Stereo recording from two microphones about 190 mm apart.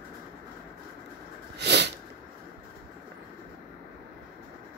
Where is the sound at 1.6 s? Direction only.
65° right (ahead or behind).